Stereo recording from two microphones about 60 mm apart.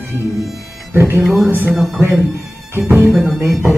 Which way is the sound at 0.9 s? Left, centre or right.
Right.